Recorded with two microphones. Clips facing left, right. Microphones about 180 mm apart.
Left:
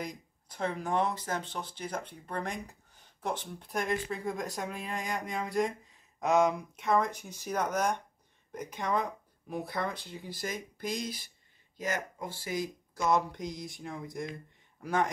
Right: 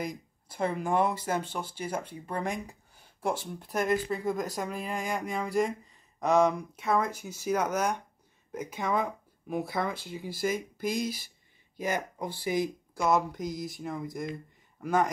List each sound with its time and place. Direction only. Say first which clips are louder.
0.0 s speech: right 4 dB; 5° right (ahead or behind)
13.1 s speech: right 1 dB; 5° right (ahead or behind)